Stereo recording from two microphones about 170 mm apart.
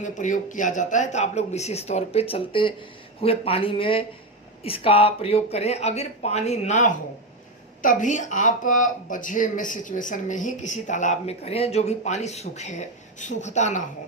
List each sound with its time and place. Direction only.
0.0 s speech: 45° left (ahead or behind)